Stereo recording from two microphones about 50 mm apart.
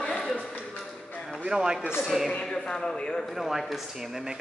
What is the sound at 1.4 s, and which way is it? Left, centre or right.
Speech, centre.